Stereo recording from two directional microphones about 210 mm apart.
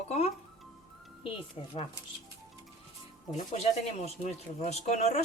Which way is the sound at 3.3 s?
30° left (ahead or behind).